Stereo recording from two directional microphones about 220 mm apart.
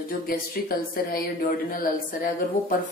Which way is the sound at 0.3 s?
40° left (ahead or behind).